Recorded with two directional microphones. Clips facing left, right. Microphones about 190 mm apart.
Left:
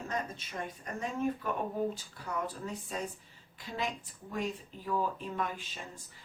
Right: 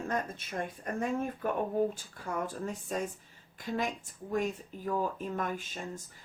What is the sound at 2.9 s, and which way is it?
Speech, 50° right (ahead or behind).